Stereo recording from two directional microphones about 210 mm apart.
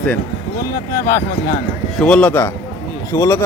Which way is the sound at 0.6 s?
45° left (ahead or behind).